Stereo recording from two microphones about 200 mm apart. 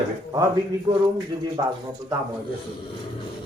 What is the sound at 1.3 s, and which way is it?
Speech, 25° right (ahead or behind).